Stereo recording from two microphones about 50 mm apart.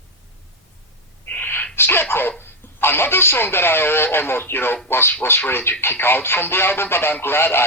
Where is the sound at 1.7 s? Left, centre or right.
Left.